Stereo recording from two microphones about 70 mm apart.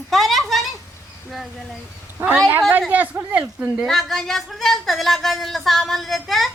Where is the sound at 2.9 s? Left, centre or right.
Right.